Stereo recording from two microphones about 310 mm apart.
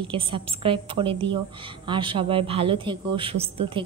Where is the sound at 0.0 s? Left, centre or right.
Centre.